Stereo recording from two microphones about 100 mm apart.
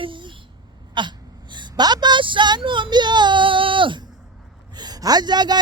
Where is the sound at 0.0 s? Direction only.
55° right (ahead or behind).